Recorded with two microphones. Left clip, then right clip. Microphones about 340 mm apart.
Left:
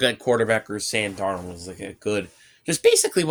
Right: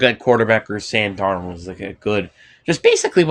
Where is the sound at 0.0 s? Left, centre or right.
Left.